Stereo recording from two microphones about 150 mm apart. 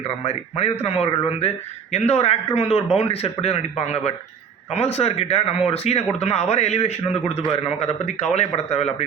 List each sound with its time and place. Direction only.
0.3 s a man's voice: 45° left (ahead or behind)